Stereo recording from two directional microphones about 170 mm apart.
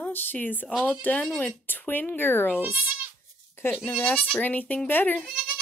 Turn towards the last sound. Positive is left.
turn(degrees=10)  # may be behind; listen again after turning